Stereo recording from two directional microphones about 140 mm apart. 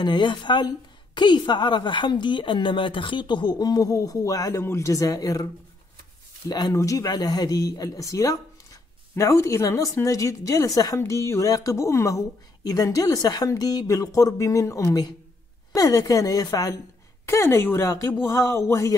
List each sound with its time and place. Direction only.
0.0 s a woman's voice: 35° left (ahead or behind)
6.5 s speech: 25° left (ahead or behind)